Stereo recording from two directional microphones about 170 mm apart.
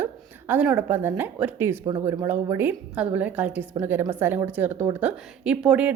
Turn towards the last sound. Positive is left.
turn(degrees=-5)  # may be behind; listen again after turning